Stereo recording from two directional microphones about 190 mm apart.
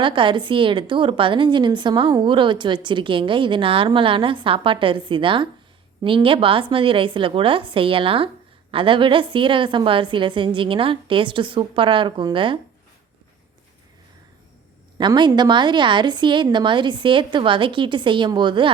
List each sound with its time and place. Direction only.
0.0 s a woman's voice: 25° right (ahead or behind)
14.9 s a woman's voice: 25° right (ahead or behind)